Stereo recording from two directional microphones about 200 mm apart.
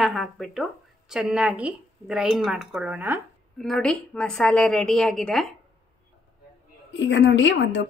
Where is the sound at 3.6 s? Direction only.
Centre (ahead or behind).